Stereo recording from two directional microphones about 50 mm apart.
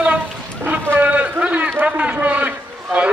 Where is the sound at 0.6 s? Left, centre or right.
Right.